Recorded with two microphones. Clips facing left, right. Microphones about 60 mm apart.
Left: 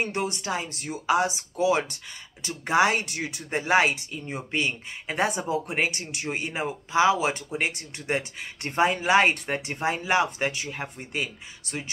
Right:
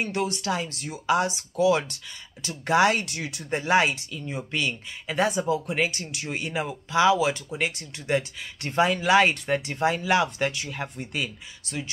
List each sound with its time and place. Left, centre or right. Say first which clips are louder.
0.0 s speech: right 1 dB; left